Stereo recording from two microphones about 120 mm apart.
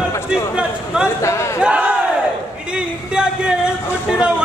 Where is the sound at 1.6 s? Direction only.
10° right (ahead or behind).